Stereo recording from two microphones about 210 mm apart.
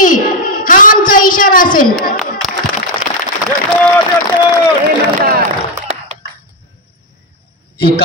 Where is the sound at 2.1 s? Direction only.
Centre (ahead or behind).